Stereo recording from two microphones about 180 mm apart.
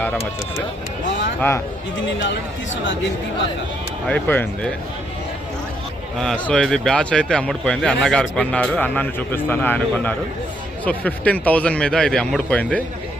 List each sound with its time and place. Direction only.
0.0 s speech: 10° left (ahead or behind)
1.4 s speech: 15° left (ahead or behind)
2.1 s speech: 80° left
4.0 s speech: 10° left (ahead or behind)
6.1 s speech: 5° left (ahead or behind)